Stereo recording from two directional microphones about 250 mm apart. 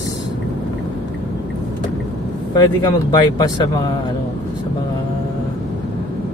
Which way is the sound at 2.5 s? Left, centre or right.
Centre.